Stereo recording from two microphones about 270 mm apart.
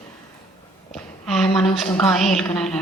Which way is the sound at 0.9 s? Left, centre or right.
Centre.